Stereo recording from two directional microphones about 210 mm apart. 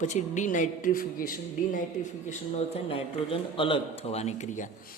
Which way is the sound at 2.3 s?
30° left (ahead or behind).